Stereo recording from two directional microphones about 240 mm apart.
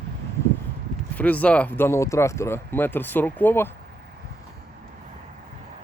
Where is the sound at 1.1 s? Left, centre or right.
Centre.